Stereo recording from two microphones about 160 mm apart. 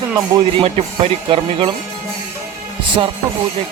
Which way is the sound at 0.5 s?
35° right (ahead or behind).